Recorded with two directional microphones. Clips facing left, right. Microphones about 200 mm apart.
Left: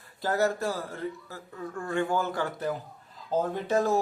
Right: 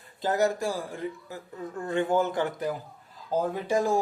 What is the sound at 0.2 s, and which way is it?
Speech, 20° right (ahead or behind).